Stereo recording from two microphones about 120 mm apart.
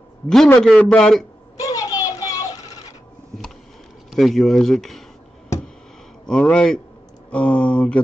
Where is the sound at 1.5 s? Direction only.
30° left (ahead or behind).